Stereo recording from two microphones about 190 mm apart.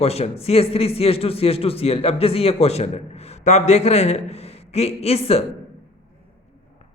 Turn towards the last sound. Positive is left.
turn(degrees=30)  # may be behind; listen again after turning